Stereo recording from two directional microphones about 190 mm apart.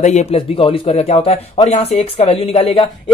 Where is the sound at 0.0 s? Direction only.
35° left (ahead or behind).